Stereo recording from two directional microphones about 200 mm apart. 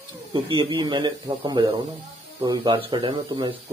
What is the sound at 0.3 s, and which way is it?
Speech, 25° right (ahead or behind).